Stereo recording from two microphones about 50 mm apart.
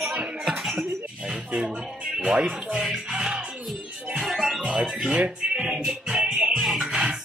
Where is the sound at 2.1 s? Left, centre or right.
Right.